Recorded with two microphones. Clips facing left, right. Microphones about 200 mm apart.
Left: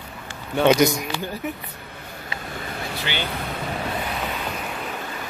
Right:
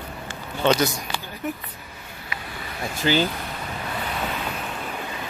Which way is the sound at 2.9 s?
40° right (ahead or behind).